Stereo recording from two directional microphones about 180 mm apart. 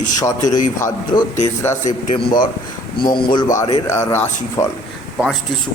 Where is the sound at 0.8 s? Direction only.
20° left (ahead or behind).